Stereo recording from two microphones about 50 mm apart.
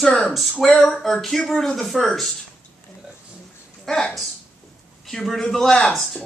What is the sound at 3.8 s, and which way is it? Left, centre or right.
A man's voice, centre.